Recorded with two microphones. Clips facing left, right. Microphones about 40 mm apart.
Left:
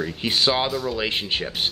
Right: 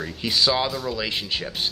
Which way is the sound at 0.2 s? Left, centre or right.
Left.